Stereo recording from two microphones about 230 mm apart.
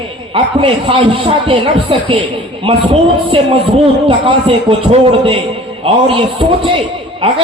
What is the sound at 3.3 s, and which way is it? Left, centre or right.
A man's voice, right.